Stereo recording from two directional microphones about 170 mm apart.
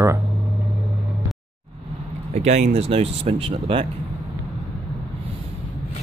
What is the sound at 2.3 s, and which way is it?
Speech, 40° right (ahead or behind).